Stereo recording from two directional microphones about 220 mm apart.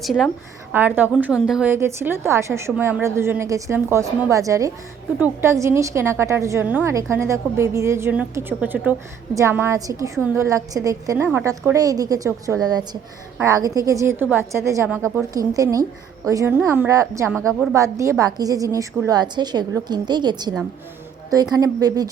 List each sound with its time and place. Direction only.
0.0 s a woman's voice: centre (ahead or behind); by 22.1 s 15° right (ahead or behind)